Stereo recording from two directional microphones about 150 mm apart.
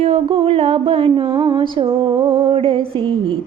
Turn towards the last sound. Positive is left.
turn(degrees=-35)  # may be behind; listen again after turning